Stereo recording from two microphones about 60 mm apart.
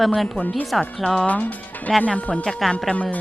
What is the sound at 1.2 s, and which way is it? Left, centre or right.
Speech, left.